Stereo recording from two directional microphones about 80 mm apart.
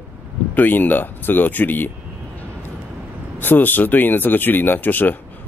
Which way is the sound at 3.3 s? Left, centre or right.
Left.